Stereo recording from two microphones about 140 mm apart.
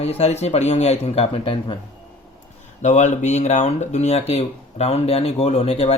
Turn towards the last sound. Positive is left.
turn(degrees=50)  # may be behind; listen again after turning